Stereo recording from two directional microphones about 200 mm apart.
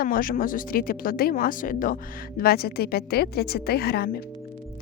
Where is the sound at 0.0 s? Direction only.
45° left (ahead or behind).